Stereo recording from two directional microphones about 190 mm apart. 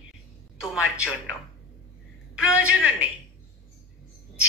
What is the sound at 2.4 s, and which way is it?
Speech, 15° left (ahead or behind).